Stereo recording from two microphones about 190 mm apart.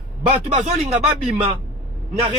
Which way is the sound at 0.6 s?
35° right (ahead or behind).